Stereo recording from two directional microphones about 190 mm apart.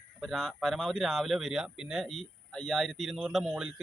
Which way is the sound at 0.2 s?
Centre (ahead or behind).